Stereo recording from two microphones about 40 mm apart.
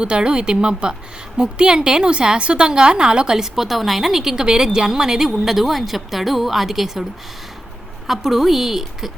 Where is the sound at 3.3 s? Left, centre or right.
Centre.